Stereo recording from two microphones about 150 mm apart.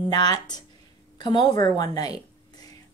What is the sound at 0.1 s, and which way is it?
Speech, 25° left (ahead or behind).